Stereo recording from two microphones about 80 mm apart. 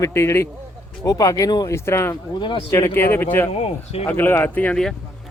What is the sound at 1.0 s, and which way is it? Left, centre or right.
Speech, left.